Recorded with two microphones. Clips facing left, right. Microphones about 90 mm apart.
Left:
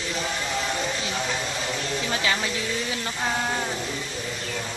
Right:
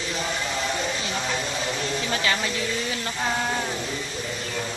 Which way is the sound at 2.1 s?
5° left (ahead or behind).